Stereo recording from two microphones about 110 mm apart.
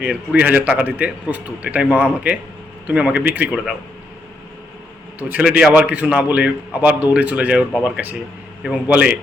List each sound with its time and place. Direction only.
0.0 s a man's voice: 10° right (ahead or behind)
5.3 s a man's voice: 10° right (ahead or behind)